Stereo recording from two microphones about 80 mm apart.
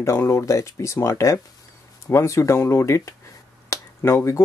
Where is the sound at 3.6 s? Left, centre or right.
Left.